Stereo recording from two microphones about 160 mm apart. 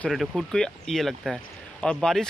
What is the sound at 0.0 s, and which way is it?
Speech, centre (ahead or behind).